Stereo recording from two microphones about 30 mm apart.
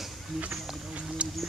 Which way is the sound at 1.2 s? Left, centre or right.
Right.